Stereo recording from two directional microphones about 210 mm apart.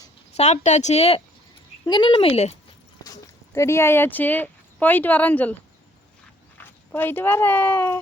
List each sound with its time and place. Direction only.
0.3 s speech: 30° left (ahead or behind)
3.5 s speech: 15° left (ahead or behind)
6.6 s speech: 10° left (ahead or behind)